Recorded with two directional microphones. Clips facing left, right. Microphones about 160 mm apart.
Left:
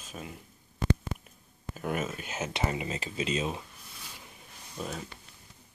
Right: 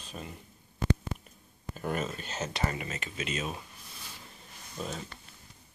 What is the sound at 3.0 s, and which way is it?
Speech, 30° left (ahead or behind).